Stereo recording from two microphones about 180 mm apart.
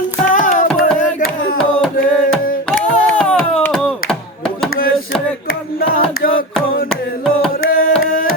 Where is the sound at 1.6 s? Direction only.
5° left (ahead or behind).